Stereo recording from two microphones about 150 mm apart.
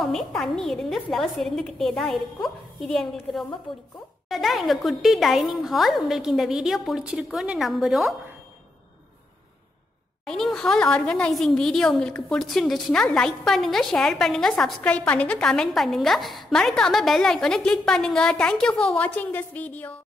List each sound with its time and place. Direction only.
0.0 s a woman's voice: centre (ahead or behind)
3.7 s a woman's voice: 35° left (ahead or behind)
4.3 s a woman's voice: centre (ahead or behind)
10.2 s a woman's voice: 5° left (ahead or behind)